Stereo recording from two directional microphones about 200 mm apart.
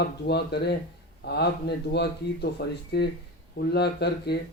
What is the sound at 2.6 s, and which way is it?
Speech, 55° left (ahead or behind).